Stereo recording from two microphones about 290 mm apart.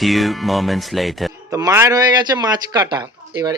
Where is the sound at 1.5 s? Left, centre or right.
Centre.